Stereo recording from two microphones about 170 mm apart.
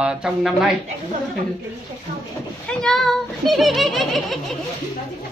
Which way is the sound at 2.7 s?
5° left (ahead or behind).